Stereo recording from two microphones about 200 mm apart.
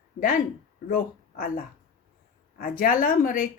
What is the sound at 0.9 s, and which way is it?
Speech, 45° left (ahead or behind).